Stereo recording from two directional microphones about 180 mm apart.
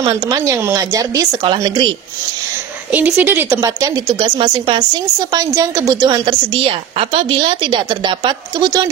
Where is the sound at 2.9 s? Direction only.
10° right (ahead or behind).